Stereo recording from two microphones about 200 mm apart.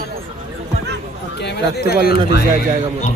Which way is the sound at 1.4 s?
55° left (ahead or behind).